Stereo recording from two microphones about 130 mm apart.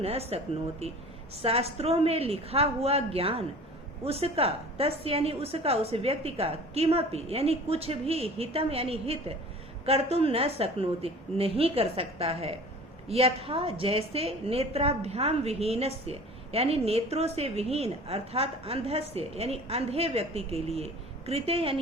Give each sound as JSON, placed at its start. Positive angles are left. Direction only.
{"t": 0.0, "sound": "a woman's voice", "side_deg": -50}